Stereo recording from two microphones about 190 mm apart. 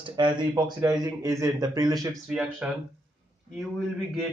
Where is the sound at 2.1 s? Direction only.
5° right (ahead or behind).